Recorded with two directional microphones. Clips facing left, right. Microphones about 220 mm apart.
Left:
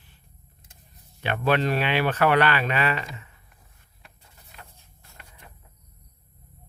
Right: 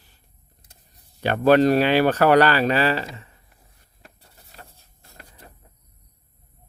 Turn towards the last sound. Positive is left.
turn(degrees=-35)  # may be behind; listen again after turning